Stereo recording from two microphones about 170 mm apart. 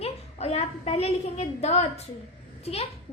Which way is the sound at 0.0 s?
35° left (ahead or behind).